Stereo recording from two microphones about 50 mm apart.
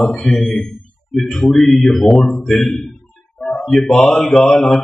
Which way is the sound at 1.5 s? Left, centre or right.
Centre.